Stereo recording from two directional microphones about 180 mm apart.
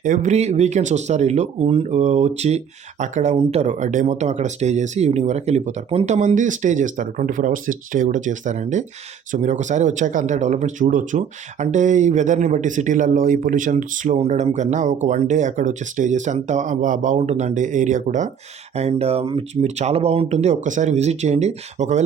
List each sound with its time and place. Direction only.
0.0 s speech: 45° right (ahead or behind)